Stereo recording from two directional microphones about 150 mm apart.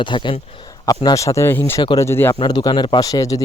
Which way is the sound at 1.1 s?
20° left (ahead or behind).